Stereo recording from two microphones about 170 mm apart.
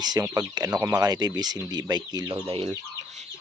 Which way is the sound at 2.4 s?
35° right (ahead or behind).